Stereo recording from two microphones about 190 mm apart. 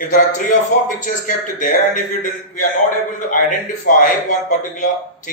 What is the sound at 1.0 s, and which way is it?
A man's voice, 45° left (ahead or behind).